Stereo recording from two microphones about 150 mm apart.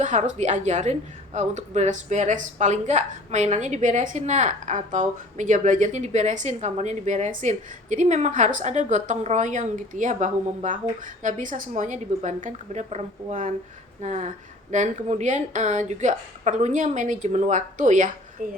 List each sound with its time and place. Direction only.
0.0 s a woman's voice: 55° right (ahead or behind)